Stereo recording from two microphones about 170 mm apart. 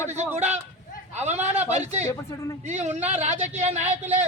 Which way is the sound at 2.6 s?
40° right (ahead or behind).